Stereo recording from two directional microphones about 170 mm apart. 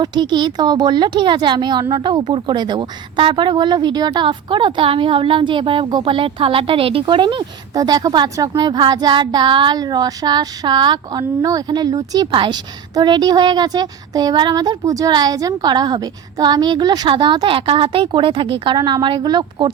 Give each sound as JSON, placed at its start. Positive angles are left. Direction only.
{"t": 0.0, "sound": "speech", "side_deg": -25}